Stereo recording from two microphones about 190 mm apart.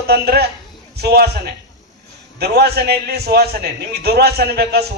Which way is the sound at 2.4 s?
60° right (ahead or behind).